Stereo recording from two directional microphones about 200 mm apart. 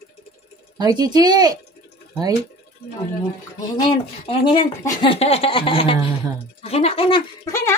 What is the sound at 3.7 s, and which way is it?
Speech, 25° left (ahead or behind).